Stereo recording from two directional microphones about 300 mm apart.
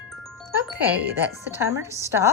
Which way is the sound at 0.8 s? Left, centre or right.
Centre.